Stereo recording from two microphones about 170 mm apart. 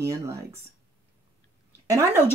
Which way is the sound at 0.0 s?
15° right (ahead or behind).